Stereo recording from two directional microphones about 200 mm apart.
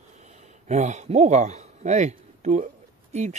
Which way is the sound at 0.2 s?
35° right (ahead or behind).